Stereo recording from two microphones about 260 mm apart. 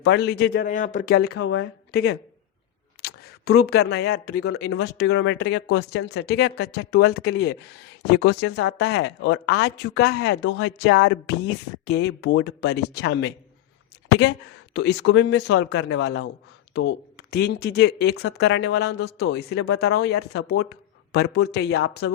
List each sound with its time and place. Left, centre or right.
0.0 s a woman's voice: left